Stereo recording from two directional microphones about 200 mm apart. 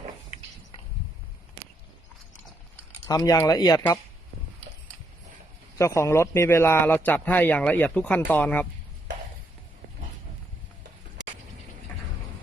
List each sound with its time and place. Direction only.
3.1 s speech: 15° left (ahead or behind)
5.7 s speech: 15° left (ahead or behind)